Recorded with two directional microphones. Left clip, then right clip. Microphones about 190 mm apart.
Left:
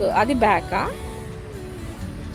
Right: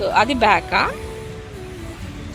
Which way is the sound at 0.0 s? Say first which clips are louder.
Right 2 dB; 20° left (ahead or behind).